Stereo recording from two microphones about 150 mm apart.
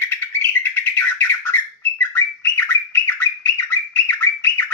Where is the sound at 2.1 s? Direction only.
15° left (ahead or behind).